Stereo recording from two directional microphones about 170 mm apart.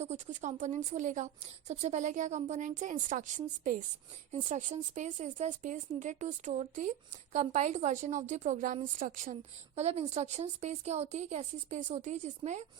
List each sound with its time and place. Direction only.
0.0 s a woman's voice: 40° right (ahead or behind)